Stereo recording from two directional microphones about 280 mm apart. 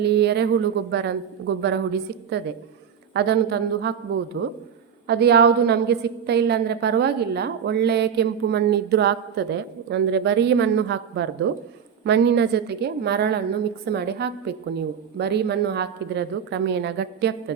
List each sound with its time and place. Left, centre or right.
0.0 s a woman's voice: right
5.0 s a woman's voice: right